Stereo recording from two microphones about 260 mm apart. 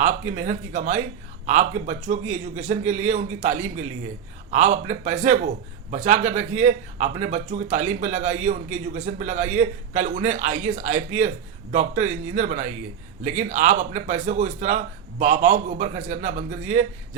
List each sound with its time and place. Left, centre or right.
0.0 s speech: right